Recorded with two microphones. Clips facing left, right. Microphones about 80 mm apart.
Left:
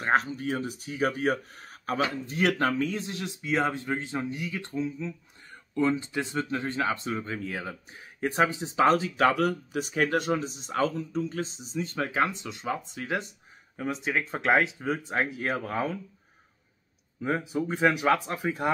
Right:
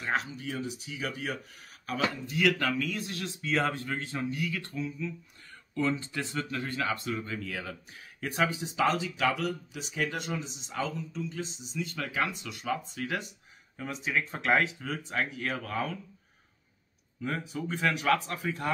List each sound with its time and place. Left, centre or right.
0.0 s speech: left
14.4 s speech: left
17.5 s speech: left